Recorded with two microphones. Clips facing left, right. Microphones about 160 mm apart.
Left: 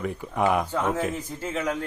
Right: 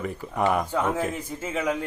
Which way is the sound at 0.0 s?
Centre (ahead or behind).